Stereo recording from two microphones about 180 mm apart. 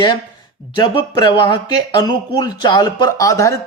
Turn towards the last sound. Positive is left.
turn(degrees=15)  # may be behind; listen again after turning